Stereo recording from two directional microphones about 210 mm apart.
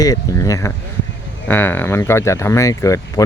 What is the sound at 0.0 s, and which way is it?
Speech, 15° left (ahead or behind).